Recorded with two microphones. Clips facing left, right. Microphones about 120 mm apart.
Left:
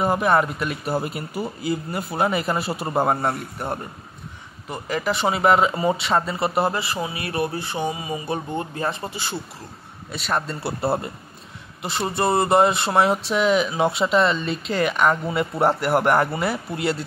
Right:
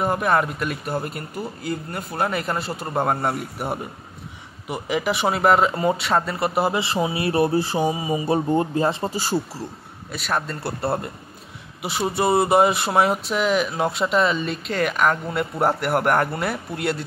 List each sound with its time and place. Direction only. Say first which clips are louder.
0.0 s speech: left 1 dB; centre (ahead or behind)
5.3 s speech: even; centre (ahead or behind)
6.7 s speech: right 4 dB; 25° right (ahead or behind)
8.3 s speech: right 8 dB; 35° right (ahead or behind)
9.1 s speech: right 6 dB; 40° right (ahead or behind)
10.1 s speech: even; centre (ahead or behind)